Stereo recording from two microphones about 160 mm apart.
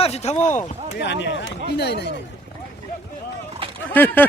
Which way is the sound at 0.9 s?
90° left.